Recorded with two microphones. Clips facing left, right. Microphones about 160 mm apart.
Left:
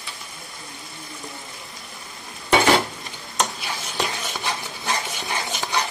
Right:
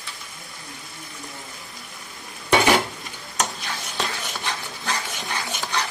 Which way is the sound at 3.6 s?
15° left (ahead or behind).